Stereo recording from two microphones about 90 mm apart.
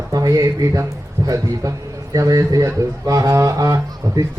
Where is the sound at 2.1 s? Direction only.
40° right (ahead or behind).